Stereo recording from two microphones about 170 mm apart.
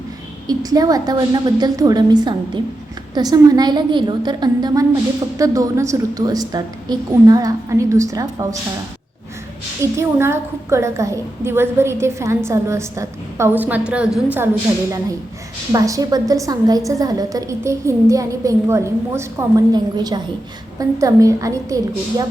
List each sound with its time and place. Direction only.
0.4 s a woman's voice: 20° right (ahead or behind)
9.8 s a woman's voice: 15° right (ahead or behind)